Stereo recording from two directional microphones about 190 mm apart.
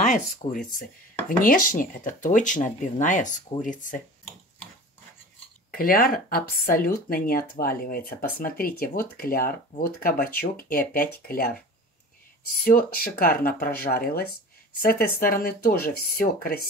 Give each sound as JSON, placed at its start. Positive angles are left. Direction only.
{"t": 0.0, "sound": "speech", "side_deg": 40}
{"t": 5.7, "sound": "speech", "side_deg": 50}
{"t": 12.6, "sound": "speech", "side_deg": 50}